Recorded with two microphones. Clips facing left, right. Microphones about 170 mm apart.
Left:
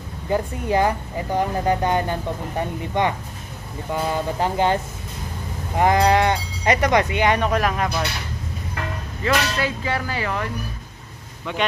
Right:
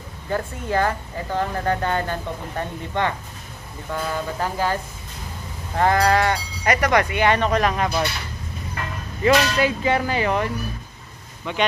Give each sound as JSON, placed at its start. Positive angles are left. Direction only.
{"t": 0.3, "sound": "speech", "side_deg": 15}
{"t": 5.8, "sound": "speech", "side_deg": 20}
{"t": 9.2, "sound": "speech", "side_deg": -20}
{"t": 11.5, "sound": "speech", "side_deg": 0}